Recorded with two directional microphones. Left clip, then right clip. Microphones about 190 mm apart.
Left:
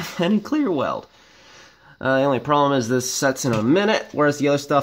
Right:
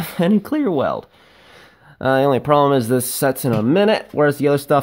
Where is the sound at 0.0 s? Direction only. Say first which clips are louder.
Right 3 dB; 45° right (ahead or behind).